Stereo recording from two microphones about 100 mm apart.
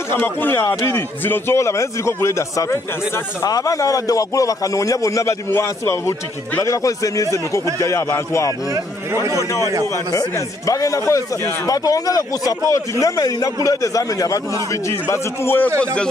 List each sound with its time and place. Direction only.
0.1 s a man's voice: 20° left (ahead or behind)
9.1 s a man's voice: 30° right (ahead or behind)
10.7 s a man's voice: 35° left (ahead or behind)
15.8 s speech: 10° left (ahead or behind)